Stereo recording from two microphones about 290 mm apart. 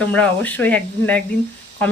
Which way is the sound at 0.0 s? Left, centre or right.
Centre.